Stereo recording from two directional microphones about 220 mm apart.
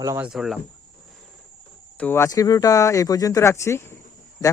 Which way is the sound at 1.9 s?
10° left (ahead or behind).